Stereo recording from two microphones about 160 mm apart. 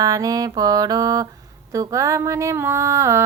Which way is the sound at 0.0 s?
20° right (ahead or behind).